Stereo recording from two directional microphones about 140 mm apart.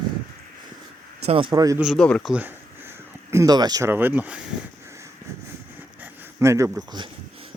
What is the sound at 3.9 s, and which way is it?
Speech, 15° right (ahead or behind).